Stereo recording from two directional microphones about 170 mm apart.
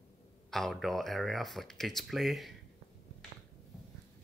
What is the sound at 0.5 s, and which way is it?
Speech, centre (ahead or behind).